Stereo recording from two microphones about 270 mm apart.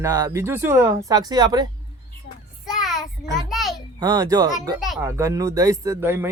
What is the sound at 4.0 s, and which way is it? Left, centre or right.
Speech, centre.